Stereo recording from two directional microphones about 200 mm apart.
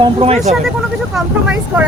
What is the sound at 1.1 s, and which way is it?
Speech, 5° right (ahead or behind).